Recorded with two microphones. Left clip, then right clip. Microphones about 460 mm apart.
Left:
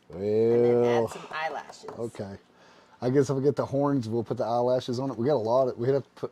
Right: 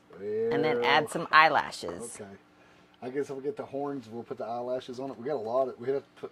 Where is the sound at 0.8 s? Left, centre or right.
Right.